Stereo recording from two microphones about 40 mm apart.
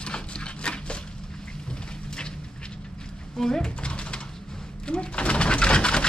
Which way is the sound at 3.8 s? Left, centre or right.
Left.